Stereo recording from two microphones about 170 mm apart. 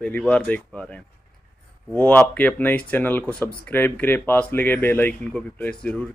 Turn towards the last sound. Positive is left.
turn(degrees=5)  # may be behind; listen again after turning